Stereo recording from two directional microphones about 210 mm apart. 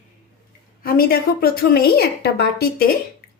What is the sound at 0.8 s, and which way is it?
A woman's voice, 45° left (ahead or behind).